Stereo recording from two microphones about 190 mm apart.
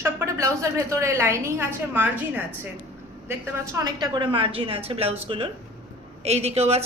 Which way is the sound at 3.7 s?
20° right (ahead or behind).